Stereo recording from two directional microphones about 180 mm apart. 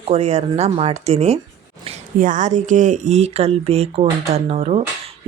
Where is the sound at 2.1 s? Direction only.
45° right (ahead or behind).